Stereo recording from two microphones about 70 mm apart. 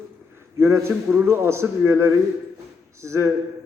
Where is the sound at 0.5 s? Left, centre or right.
Right.